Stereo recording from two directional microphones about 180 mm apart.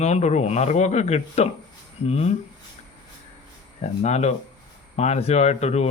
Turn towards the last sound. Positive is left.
turn(degrees=40)  # may be behind; listen again after turning